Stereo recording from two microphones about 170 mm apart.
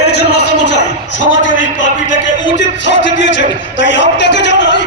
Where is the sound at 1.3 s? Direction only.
90° left.